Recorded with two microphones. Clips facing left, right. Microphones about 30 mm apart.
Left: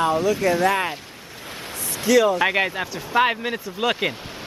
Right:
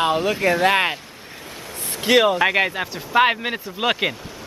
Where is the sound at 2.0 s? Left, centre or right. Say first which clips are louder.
Right 1 dB; right.